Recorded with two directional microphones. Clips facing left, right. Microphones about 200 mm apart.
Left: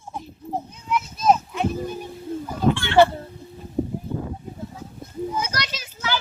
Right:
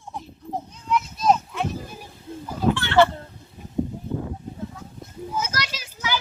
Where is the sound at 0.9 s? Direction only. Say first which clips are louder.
Right 1 dB; centre (ahead or behind).